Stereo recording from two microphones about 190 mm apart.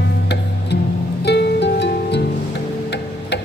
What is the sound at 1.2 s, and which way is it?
Music, 60° left (ahead or behind).